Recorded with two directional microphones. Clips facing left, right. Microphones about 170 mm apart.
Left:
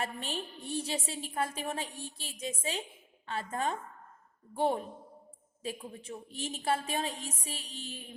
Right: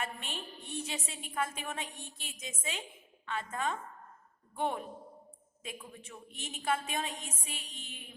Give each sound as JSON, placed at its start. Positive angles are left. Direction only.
{"t": 0.0, "sound": "a woman's voice", "side_deg": 35}